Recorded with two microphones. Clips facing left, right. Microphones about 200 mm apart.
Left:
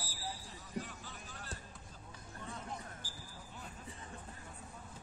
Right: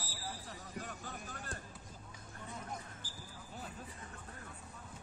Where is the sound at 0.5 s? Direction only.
50° right (ahead or behind).